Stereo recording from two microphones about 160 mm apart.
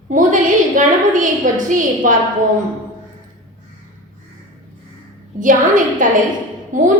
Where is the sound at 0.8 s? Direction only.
50° right (ahead or behind).